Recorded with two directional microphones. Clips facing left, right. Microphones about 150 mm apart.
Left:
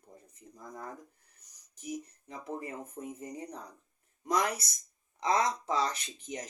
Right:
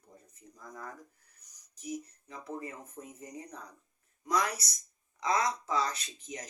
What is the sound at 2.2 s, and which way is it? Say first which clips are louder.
Speech: left 1 dB; 25° left (ahead or behind).